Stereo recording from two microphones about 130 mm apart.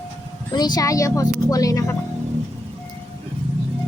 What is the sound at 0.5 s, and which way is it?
Speech, 30° left (ahead or behind).